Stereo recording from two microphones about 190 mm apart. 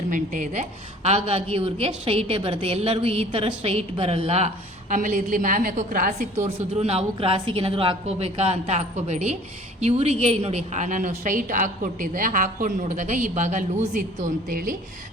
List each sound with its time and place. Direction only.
0.1 s a woman's voice: 45° right (ahead or behind)
6.7 s a woman's voice: 30° right (ahead or behind)